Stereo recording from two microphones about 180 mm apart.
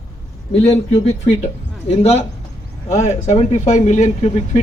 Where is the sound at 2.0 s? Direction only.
35° left (ahead or behind).